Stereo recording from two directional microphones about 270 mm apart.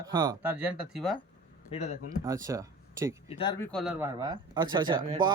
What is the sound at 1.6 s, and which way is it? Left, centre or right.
Speech, left.